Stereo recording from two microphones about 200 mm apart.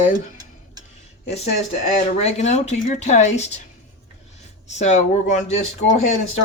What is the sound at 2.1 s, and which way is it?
Speech, 35° left (ahead or behind).